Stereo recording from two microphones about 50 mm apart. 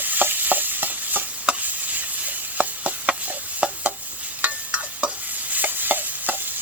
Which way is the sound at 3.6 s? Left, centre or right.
Right.